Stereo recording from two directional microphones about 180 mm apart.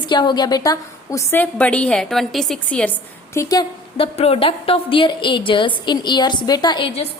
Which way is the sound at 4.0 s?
35° left (ahead or behind).